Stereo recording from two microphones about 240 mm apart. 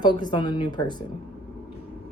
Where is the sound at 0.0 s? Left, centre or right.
Centre.